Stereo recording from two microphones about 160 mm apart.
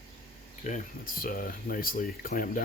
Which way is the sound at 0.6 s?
55° left (ahead or behind).